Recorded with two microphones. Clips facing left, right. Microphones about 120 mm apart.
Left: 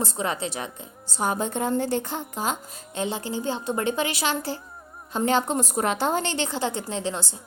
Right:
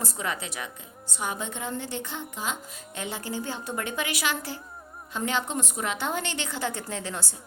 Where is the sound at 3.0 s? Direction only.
25° left (ahead or behind).